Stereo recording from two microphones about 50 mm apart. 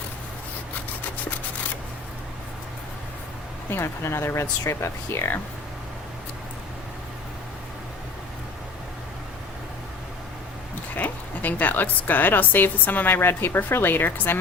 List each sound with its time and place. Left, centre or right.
3.7 s speech: left
10.9 s a woman's voice: left